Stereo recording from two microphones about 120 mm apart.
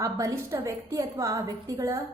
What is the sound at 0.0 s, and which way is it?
A woman's voice, 25° right (ahead or behind).